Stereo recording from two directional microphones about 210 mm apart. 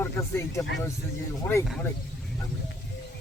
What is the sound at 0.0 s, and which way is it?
Speech, 10° left (ahead or behind).